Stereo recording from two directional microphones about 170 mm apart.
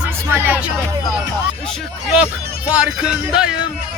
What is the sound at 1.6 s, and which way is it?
Speech, 5° right (ahead or behind).